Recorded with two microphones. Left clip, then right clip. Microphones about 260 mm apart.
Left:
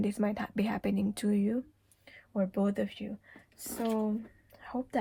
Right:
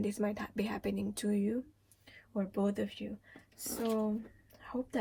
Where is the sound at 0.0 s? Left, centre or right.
Left.